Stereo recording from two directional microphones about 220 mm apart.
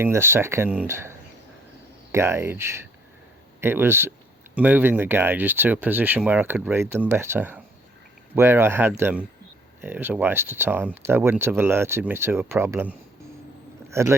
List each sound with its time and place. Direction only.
0.0 s speech: 10° right (ahead or behind)
2.1 s speech: 10° right (ahead or behind)